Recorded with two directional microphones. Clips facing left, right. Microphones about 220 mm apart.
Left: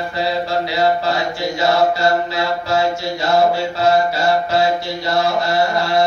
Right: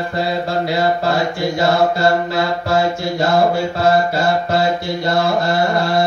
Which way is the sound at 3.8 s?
55° right (ahead or behind).